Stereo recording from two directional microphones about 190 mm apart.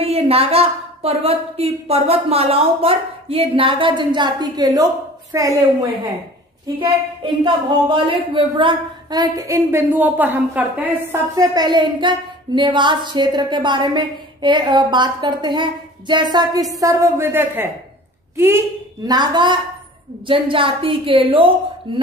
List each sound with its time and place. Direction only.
0.0 s a woman's voice: 30° right (ahead or behind)
7.4 s a woman's voice: 25° right (ahead or behind)